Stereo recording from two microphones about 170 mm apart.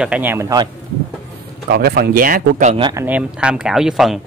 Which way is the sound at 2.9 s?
10° right (ahead or behind).